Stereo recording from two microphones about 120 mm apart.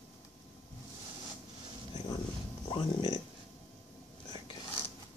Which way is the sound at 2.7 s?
40° left (ahead or behind).